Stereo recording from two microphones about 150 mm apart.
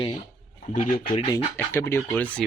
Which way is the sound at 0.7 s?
55° left (ahead or behind).